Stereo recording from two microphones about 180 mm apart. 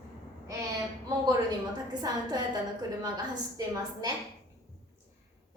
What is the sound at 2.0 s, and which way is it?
A woman's voice, 20° right (ahead or behind).